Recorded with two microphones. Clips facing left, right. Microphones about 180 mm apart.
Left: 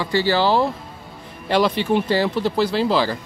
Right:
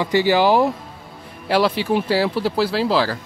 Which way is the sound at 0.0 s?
15° right (ahead or behind).